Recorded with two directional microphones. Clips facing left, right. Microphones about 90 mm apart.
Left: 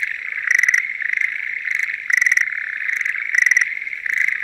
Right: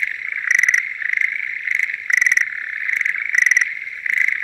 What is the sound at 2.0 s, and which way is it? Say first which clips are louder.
Frog: even; 5° left (ahead or behind).